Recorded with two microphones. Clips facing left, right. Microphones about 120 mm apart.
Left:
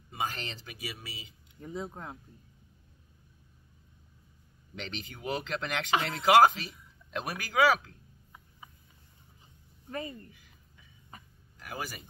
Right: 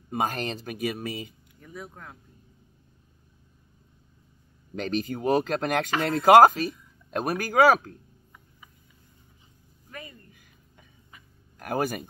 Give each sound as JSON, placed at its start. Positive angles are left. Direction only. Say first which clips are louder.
{"t": 0.1, "sound": "speech", "louder": "right 8 dB", "side_deg": -50}
{"t": 1.6, "sound": "speech", "louder": "left 4 dB", "side_deg": 25}
{"t": 4.7, "sound": "speech", "louder": "right 13 dB", "side_deg": -45}
{"t": 9.8, "sound": "speech", "louder": "left 6 dB", "side_deg": 30}
{"t": 11.5, "sound": "speech", "louder": "right 12 dB", "side_deg": -55}